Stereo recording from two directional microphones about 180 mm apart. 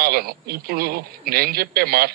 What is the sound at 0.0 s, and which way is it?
A man's voice, 60° right (ahead or behind).